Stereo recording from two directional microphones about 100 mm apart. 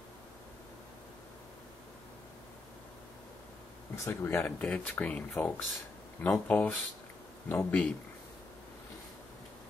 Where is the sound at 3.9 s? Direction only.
30° left (ahead or behind).